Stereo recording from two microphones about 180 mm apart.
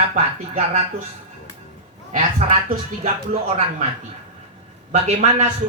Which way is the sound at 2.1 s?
45° right (ahead or behind).